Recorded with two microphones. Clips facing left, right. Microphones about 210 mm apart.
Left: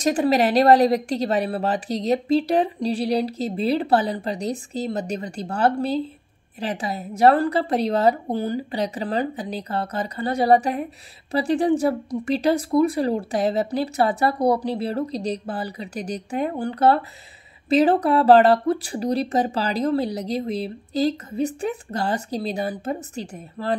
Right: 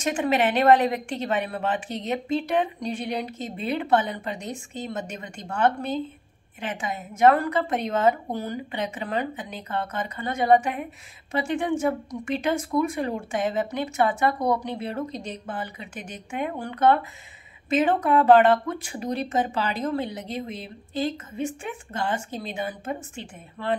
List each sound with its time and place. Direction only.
0.0 s speech: 35° left (ahead or behind)